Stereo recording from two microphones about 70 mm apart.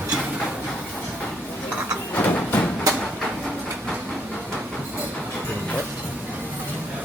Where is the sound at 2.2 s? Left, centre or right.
Left.